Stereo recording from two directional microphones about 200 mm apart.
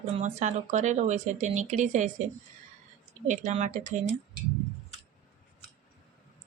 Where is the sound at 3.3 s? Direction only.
35° right (ahead or behind).